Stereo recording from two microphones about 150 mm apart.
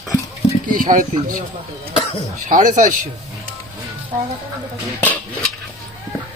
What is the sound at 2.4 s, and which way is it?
Speech, 60° right (ahead or behind).